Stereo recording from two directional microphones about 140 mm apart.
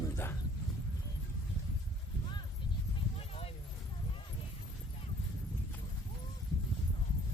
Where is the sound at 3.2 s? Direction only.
45° left (ahead or behind).